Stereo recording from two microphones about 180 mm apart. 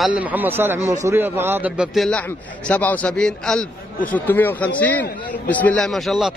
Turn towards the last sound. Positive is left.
turn(degrees=0)  # may be behind; listen again after turning